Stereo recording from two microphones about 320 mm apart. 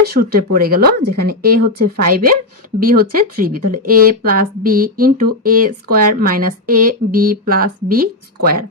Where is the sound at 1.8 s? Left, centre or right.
Right.